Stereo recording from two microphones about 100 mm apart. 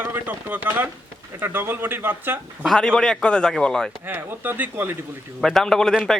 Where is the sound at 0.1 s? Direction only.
20° right (ahead or behind).